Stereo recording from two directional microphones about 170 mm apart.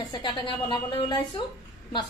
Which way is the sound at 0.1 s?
25° left (ahead or behind).